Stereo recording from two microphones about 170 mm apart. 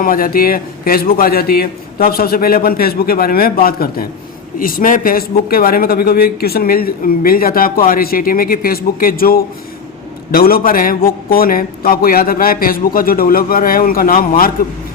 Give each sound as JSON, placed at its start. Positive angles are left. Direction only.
{"t": 0.0, "sound": "speech", "side_deg": 55}